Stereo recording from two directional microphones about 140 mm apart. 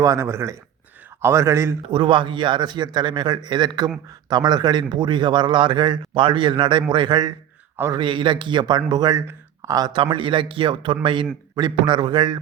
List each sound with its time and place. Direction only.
0.0 s speech: 20° right (ahead or behind)
1.9 s a man's voice: 35° right (ahead or behind)